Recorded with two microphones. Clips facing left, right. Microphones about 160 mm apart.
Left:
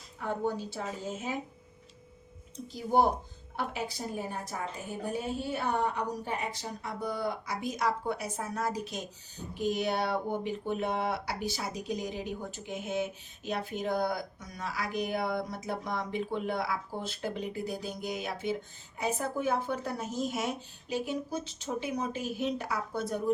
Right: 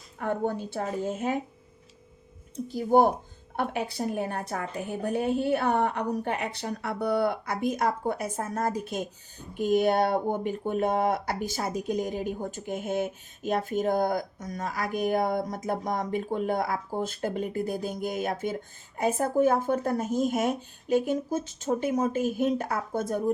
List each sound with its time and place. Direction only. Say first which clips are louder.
0.2 s a woman's voice: right 4 dB; 55° right (ahead or behind)
2.6 s a woman's voice: right 5 dB; 50° right (ahead or behind)